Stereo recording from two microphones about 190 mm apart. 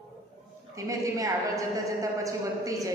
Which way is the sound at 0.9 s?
15° right (ahead or behind).